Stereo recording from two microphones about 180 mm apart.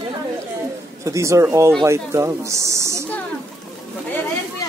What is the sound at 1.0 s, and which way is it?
Speech, 15° right (ahead or behind).